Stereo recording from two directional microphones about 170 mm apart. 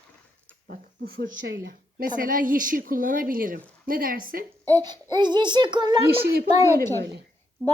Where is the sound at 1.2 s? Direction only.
85° right; by 4.4 s 55° right (ahead or behind).